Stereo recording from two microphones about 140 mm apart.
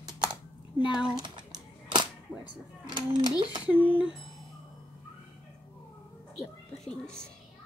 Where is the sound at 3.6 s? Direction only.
10° right (ahead or behind).